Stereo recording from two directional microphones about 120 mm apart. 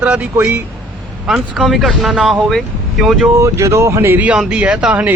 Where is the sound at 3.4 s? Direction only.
25° right (ahead or behind); by 5.1 s 10° right (ahead or behind).